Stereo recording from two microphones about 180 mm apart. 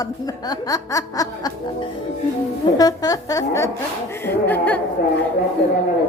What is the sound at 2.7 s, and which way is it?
Snicker, 20° left (ahead or behind).